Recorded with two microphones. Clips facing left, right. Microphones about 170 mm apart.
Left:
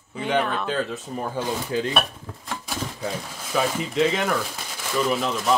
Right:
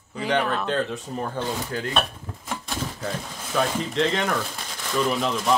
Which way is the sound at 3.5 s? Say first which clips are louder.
Even; 5° left (ahead or behind).